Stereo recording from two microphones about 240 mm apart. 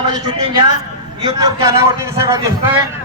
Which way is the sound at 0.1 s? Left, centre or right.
Centre.